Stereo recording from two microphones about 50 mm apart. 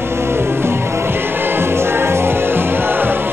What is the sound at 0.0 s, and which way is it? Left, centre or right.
Music, right.